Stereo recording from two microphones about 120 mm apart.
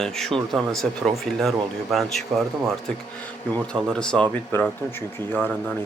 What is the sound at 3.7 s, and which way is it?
Speech, 5° left (ahead or behind).